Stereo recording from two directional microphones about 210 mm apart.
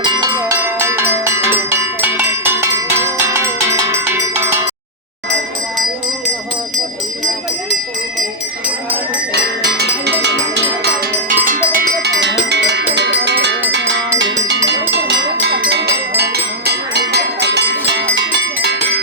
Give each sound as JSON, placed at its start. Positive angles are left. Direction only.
{"t": 0.0, "sound": "cowbell", "side_deg": -20}
{"t": 9.3, "sound": "cowbell", "side_deg": -50}
{"t": 14.7, "sound": "music", "side_deg": -55}